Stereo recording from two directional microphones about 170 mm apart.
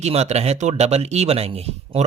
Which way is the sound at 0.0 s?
40° right (ahead or behind).